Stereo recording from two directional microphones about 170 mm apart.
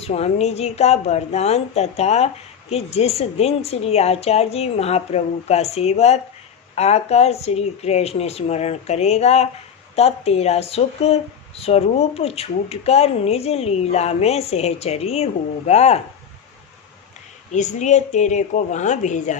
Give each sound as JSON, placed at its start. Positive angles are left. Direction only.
{"t": 0.0, "sound": "speech", "side_deg": 40}
{"t": 17.5, "sound": "a woman's voice", "side_deg": 45}